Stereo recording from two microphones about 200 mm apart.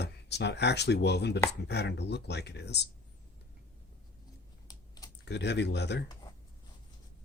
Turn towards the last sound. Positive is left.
turn(degrees=60)  # may be behind; listen again after turning